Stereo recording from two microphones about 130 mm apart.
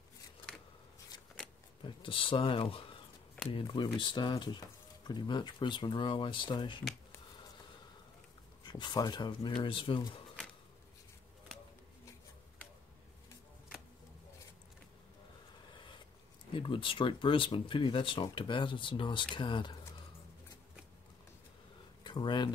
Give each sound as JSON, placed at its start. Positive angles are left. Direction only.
{"t": 1.8, "sound": "speech", "side_deg": 40}
{"t": 8.6, "sound": "speech", "side_deg": 35}
{"t": 16.5, "sound": "speech", "side_deg": 40}
{"t": 22.0, "sound": "speech", "side_deg": 35}